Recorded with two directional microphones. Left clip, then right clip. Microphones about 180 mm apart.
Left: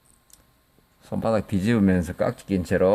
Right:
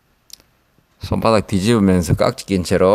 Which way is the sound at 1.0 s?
20° right (ahead or behind).